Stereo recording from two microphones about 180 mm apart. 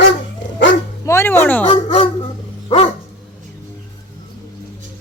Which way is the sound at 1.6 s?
30° left (ahead or behind).